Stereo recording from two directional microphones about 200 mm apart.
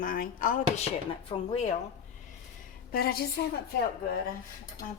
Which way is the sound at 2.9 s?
50° left (ahead or behind).